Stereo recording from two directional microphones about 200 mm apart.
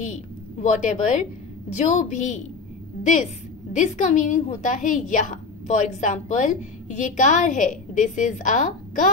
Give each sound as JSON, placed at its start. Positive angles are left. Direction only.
{"t": 0.0, "sound": "a woman's voice", "side_deg": 35}
{"t": 3.7, "sound": "a woman's voice", "side_deg": 40}